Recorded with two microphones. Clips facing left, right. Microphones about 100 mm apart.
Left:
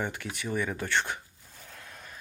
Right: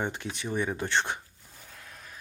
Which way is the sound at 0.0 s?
20° right (ahead or behind).